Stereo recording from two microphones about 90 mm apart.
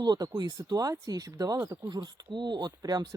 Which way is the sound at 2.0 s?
60° right (ahead or behind).